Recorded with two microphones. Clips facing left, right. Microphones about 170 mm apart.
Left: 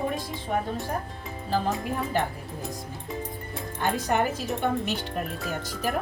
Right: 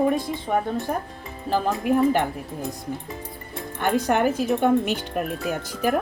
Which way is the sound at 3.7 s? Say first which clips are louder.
Right 4 dB; 60° right (ahead or behind).